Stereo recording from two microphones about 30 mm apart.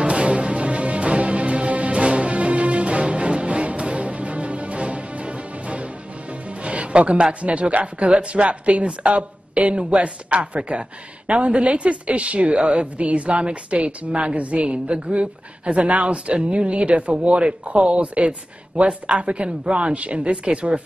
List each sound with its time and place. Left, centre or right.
0.0 s music: right
7.4 s speech: right
19.6 s speech: right
19.9 s speech: right